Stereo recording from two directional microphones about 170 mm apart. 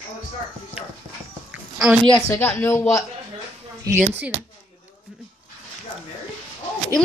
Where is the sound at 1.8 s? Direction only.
5° right (ahead or behind).